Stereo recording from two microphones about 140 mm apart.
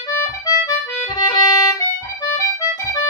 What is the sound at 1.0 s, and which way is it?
Music, 30° left (ahead or behind).